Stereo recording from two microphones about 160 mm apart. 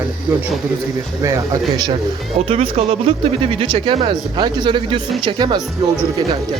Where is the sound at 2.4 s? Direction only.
35° right (ahead or behind).